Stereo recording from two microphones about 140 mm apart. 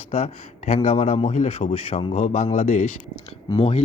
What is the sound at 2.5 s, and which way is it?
Speech, 70° left (ahead or behind).